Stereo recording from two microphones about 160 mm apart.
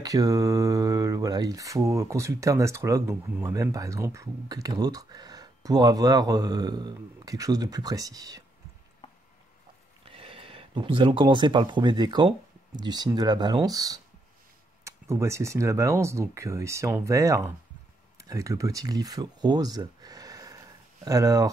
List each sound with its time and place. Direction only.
0.0 s speech: 20° right (ahead or behind)
10.0 s speech: 35° right (ahead or behind)